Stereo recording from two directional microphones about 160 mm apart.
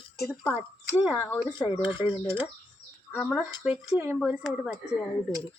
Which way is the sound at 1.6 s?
30° left (ahead or behind).